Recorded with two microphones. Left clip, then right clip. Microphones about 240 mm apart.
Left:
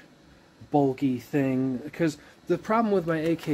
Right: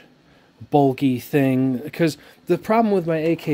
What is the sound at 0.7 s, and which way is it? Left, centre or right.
Speech, right.